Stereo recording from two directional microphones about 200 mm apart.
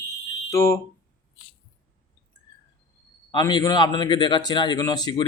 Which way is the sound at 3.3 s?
20° left (ahead or behind).